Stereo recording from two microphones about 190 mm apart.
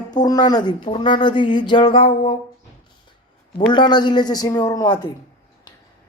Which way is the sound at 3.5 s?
25° left (ahead or behind).